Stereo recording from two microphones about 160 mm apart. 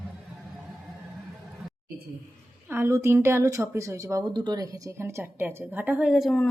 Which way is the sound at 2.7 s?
15° right (ahead or behind).